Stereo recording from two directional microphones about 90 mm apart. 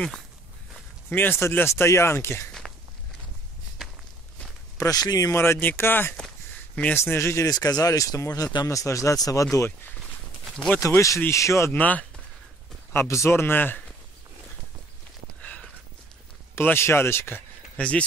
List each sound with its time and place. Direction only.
1.1 s speech: 25° left (ahead or behind)
2.6 s walk: 5° left (ahead or behind)
4.8 s speech: 45° left (ahead or behind)
5.4 s speech: 25° left (ahead or behind)
6.1 s a sound: 10° left (ahead or behind)
7.0 s speech: 30° left (ahead or behind)
7.4 s speech: 45° left (ahead or behind)
10.4 s a sound: 5° left (ahead or behind)
10.8 s speech: 35° left (ahead or behind)
11.8 s speech: 15° left (ahead or behind)
12.9 s speech: 30° left (ahead or behind)
16.5 s speech: 25° left (ahead or behind)
17.7 s speech: 15° left (ahead or behind)